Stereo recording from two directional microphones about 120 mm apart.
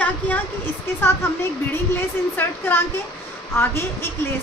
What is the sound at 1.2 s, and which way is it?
A woman's voice, 20° left (ahead or behind).